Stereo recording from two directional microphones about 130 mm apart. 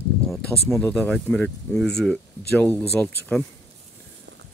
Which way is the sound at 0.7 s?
10° left (ahead or behind).